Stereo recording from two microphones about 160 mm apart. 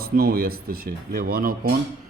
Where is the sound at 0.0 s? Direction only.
70° right (ahead or behind).